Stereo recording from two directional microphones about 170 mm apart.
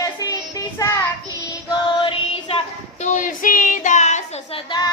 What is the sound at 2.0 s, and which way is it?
Music, 30° left (ahead or behind).